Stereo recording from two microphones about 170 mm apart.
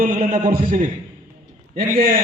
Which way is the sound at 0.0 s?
55° right (ahead or behind).